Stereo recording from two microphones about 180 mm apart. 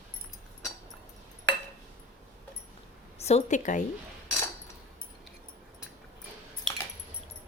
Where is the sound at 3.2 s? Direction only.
35° left (ahead or behind).